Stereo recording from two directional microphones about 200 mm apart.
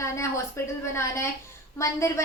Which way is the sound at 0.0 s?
15° left (ahead or behind).